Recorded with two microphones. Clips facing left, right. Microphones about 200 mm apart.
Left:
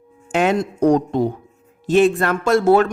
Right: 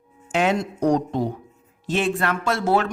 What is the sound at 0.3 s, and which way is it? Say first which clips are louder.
Speech: left 4 dB; 55° left (ahead or behind).